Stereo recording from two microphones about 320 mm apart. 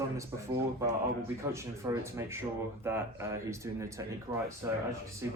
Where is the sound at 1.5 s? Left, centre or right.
Centre.